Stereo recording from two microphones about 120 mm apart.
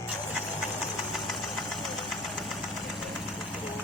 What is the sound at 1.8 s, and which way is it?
Engine, centre (ahead or behind).